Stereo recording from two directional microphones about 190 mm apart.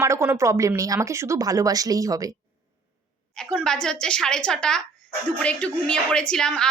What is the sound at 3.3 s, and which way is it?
Speech, 5° left (ahead or behind).